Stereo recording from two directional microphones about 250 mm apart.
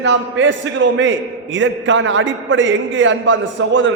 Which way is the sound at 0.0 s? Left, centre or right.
Right.